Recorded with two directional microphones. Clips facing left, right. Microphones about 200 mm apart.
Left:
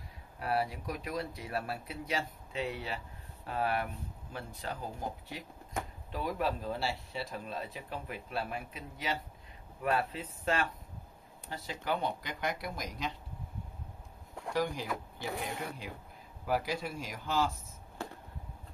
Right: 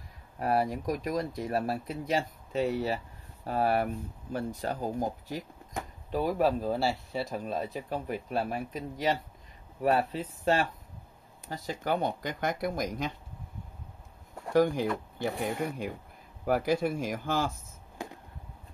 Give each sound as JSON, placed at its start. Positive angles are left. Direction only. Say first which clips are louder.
{"t": 0.4, "sound": "speech", "louder": "right 5 dB", "side_deg": -45}
{"t": 14.5, "sound": "speech", "louder": "right 9 dB", "side_deg": -50}
{"t": 16.4, "sound": "speech", "louder": "right 7 dB", "side_deg": -55}
{"t": 18.0, "sound": "a sound", "louder": "right 2 dB", "side_deg": -15}